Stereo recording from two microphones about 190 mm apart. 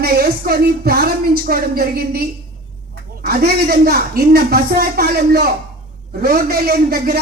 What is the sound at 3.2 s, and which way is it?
A woman's voice, 55° right (ahead or behind).